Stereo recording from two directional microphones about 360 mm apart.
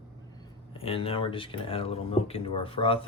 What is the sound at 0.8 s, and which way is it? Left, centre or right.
Speech, centre.